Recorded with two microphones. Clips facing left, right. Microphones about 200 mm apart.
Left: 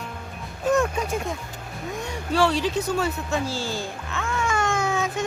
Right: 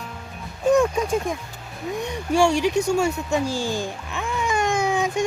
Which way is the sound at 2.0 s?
15° right (ahead or behind).